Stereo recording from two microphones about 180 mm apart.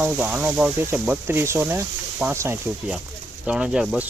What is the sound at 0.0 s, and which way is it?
Speech, 5° right (ahead or behind).